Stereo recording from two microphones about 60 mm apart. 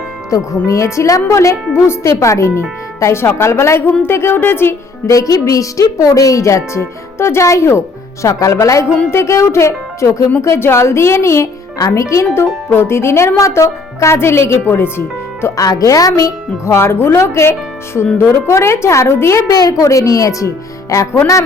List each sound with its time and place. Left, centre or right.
0.3 s speech: left
5.1 s speech: left
11.8 s speech: left
15.5 s a woman's voice: left
16.6 s speech: left
19.5 s a woman's voice: left